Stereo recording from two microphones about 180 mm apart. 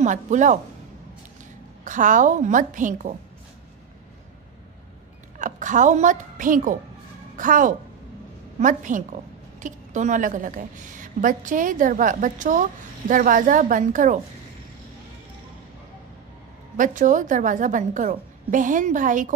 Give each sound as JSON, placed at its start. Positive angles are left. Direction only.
{"t": 0.0, "sound": "a woman's voice", "side_deg": -45}
{"t": 1.9, "sound": "a woman's voice", "side_deg": -45}
{"t": 5.4, "sound": "a woman's voice", "side_deg": -45}
{"t": 16.7, "sound": "a woman's voice", "side_deg": -45}